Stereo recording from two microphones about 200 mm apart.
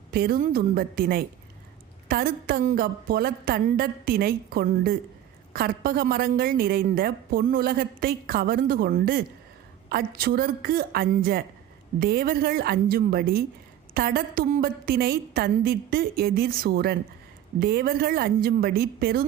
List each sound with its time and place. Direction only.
0.1 s a woman's voice: 50° right (ahead or behind)